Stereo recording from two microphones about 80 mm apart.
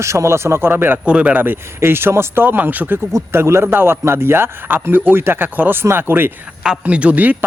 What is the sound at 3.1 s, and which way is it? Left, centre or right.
Speech, right.